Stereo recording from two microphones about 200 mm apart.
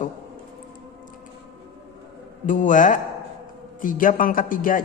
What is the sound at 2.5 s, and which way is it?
A man's voice, 40° left (ahead or behind).